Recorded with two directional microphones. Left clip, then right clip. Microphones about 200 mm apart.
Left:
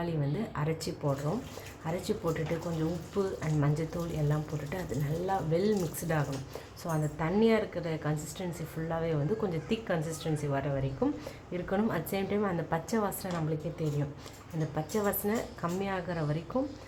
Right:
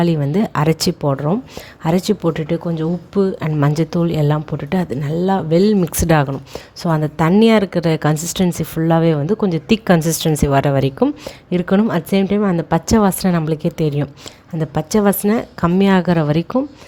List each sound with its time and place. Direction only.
0.0 s speech: 45° right (ahead or behind)
11.5 s speech: 40° right (ahead or behind)